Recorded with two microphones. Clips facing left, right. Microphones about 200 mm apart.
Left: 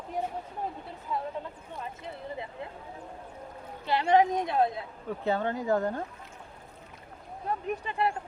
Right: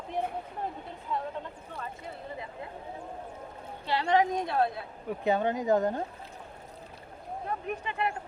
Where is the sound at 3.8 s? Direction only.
20° left (ahead or behind).